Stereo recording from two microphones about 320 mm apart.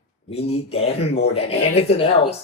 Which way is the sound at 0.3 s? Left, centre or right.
Centre.